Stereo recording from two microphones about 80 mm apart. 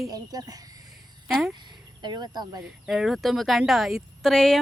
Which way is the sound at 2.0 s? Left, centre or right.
Right.